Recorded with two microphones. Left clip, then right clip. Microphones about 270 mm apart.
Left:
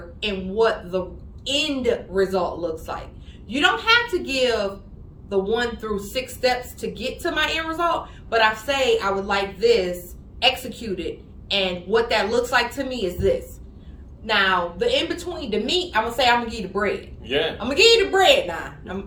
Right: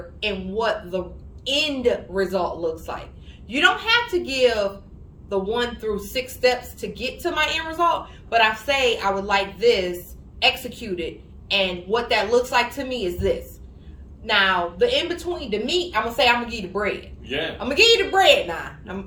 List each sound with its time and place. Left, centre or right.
0.2 s a woman's voice: centre